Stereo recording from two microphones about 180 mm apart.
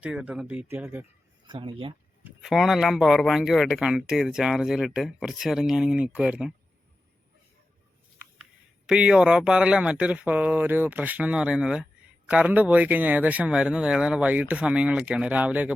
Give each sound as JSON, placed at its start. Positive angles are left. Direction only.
{"t": 0.0, "sound": "speech", "side_deg": -5}
{"t": 1.5, "sound": "speech", "side_deg": -25}
{"t": 2.2, "sound": "speech", "side_deg": 0}
{"t": 8.9, "sound": "speech", "side_deg": -5}